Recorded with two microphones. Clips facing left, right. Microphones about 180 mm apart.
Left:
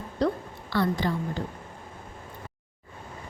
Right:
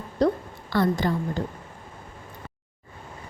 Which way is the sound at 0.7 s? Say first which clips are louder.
Right 3 dB; 45° right (ahead or behind).